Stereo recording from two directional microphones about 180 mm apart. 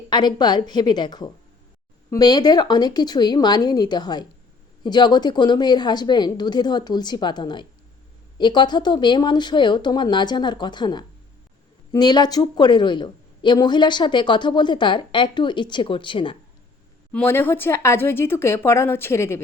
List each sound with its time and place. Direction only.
0.1 s speech: 25° left (ahead or behind)
17.1 s speech: 10° left (ahead or behind)